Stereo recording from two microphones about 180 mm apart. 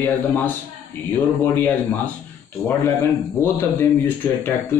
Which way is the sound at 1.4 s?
10° left (ahead or behind).